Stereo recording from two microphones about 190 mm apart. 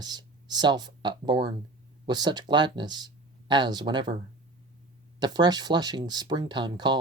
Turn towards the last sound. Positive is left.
turn(degrees=-25)  # may be behind; listen again after turning